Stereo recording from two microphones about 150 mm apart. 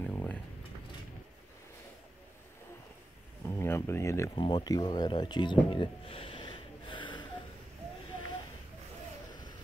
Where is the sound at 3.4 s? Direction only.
15° left (ahead or behind).